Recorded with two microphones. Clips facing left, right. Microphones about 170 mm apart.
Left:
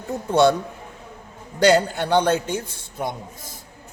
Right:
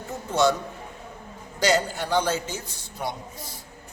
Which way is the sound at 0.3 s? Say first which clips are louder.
Left 5 dB; 60° left (ahead or behind).